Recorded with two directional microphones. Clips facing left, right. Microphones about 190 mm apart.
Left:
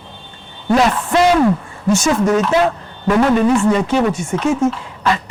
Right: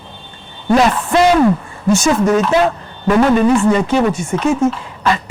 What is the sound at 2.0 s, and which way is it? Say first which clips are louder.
Speech: right 1 dB; 20° right (ahead or behind).